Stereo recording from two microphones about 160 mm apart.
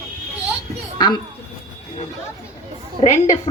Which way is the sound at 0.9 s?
25° left (ahead or behind).